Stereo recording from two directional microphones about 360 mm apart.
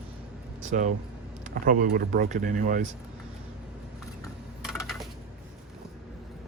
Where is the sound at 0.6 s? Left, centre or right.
Centre.